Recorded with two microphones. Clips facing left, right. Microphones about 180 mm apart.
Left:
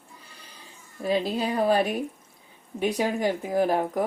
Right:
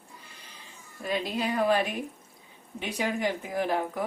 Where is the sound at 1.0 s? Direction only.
30° left (ahead or behind).